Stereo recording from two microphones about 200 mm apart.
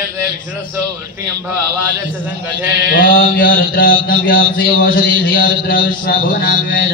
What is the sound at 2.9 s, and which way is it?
Mantra, 45° left (ahead or behind).